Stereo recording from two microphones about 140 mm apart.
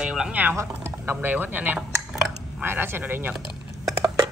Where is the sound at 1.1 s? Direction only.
15° right (ahead or behind).